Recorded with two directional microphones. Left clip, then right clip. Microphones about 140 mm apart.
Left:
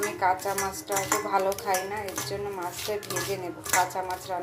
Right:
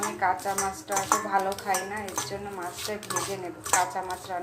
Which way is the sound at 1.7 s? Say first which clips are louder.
Even; 20° left (ahead or behind).